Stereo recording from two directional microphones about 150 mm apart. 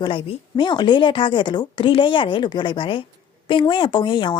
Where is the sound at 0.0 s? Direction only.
35° left (ahead or behind).